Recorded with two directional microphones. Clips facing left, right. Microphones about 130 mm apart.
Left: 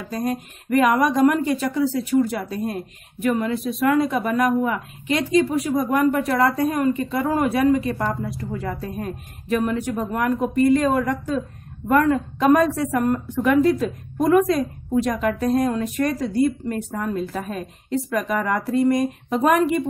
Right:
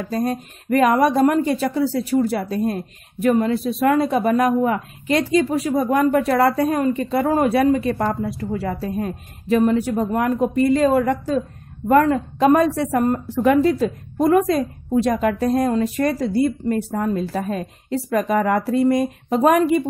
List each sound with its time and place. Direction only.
0.3 s speech: 35° right (ahead or behind)